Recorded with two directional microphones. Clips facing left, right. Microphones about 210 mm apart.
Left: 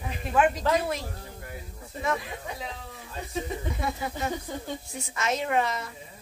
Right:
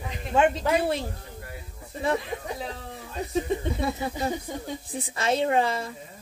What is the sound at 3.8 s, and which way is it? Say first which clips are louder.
A woman's voice: right 3 dB; 30° right (ahead or behind).